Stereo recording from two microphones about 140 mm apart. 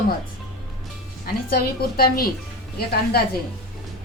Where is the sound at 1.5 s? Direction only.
90° left.